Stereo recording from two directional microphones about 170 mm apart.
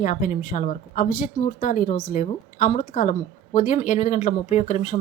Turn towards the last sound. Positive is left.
turn(degrees=45)  # may be behind; listen again after turning